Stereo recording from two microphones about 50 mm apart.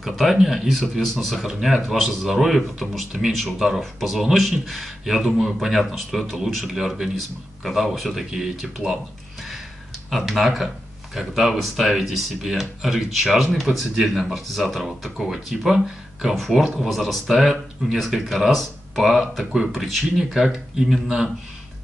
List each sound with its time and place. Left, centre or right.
0.0 s speech: centre
10.0 s speech: centre